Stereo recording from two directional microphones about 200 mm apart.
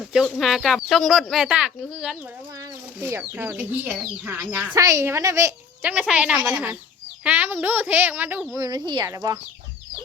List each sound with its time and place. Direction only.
0.0 s speech: centre (ahead or behind)
8.5 s speech: 20° right (ahead or behind)